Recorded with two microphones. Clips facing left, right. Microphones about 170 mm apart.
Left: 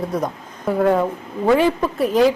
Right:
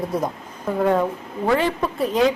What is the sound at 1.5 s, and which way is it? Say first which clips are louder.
Speech: left 5 dB; 10° left (ahead or behind).